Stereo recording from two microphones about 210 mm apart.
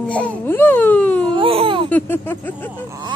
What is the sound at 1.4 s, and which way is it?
Baby cry, 25° right (ahead or behind).